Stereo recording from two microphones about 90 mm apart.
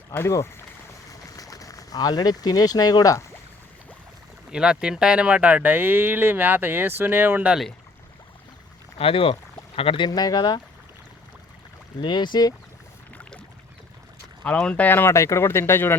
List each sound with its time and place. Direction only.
0.1 s speech: 30° left (ahead or behind)
1.4 s speech: 40° left (ahead or behind)
4.5 s speech: 10° right (ahead or behind)
9.0 s speech: 90° left
10.1 s speech: 45° left (ahead or behind)
11.9 s speech: 55° left (ahead or behind)
14.4 s speech: 10° left (ahead or behind)